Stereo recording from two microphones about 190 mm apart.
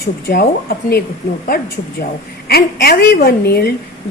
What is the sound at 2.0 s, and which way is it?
A woman's voice, 55° left (ahead or behind).